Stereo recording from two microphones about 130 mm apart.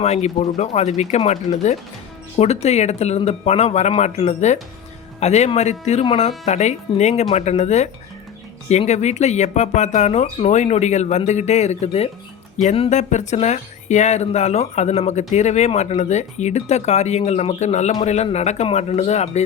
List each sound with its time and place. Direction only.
0.0 s speech: 55° left (ahead or behind)
8.9 s speech: 60° left (ahead or behind)
12.9 s speech: 65° left (ahead or behind)